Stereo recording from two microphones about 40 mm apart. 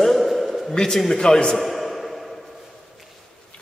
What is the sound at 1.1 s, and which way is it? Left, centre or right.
Speech, left.